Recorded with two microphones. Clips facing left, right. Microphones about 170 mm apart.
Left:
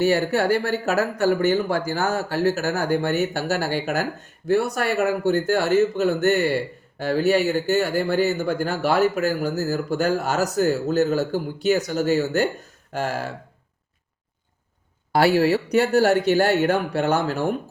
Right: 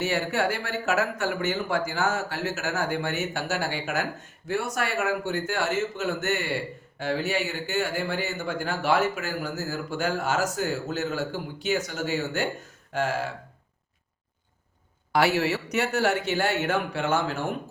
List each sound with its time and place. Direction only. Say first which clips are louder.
0.0 s speech: left 6 dB; 35° left (ahead or behind)
15.1 s speech: left 6 dB; 35° left (ahead or behind)